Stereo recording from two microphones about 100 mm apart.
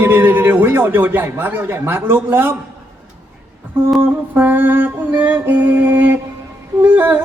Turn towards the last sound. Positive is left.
turn(degrees=-20)  # may be behind; listen again after turning